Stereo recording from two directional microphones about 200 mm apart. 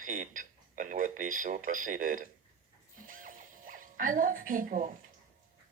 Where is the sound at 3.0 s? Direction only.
40° right (ahead or behind).